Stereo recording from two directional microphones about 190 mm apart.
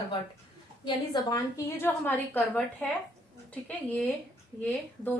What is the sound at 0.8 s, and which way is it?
A woman's voice, 20° left (ahead or behind).